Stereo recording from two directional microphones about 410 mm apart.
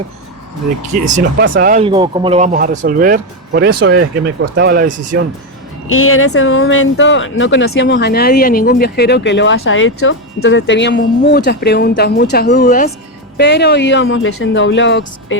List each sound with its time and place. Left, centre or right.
0.9 s speech: centre
5.9 s speech: left